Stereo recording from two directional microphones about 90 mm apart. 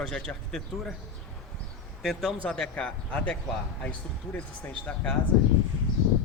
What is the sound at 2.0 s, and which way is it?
Speech, centre (ahead or behind).